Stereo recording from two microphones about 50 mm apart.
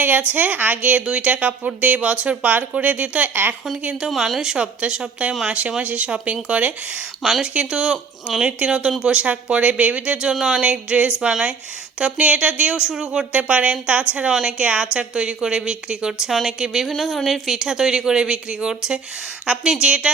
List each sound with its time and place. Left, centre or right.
0.2 s a woman's voice: right
4.1 s a woman's voice: centre; by 6.7 s right
7.2 s speech: centre
7.4 s a woman's voice: centre
10.3 s a woman's voice: centre
10.6 s a woman's voice: right
13.3 s a woman's voice: right
16.2 s a woman's voice: centre